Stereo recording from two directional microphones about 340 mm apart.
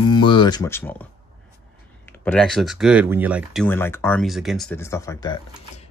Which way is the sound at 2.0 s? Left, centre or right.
Centre.